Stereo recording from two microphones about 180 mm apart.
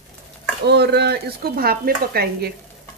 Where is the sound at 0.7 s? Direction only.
65° right (ahead or behind).